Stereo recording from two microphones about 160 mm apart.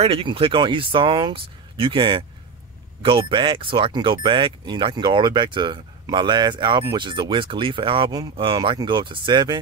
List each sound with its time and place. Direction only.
0.0 s speech: 35° right (ahead or behind)